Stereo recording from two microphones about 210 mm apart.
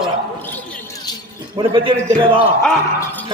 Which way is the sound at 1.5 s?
25° right (ahead or behind).